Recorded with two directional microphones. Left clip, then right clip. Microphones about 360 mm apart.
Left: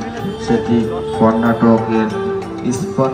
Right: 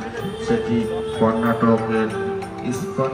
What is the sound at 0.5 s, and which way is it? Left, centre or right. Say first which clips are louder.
Music: left 5 dB; left.